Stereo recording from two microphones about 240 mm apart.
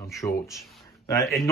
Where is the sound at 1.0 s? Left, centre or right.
Centre.